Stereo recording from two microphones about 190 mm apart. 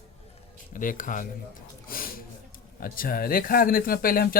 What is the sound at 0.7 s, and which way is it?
Speech, 45° left (ahead or behind).